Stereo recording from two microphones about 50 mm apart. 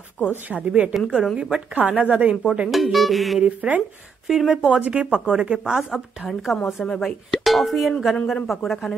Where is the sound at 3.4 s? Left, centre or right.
Right.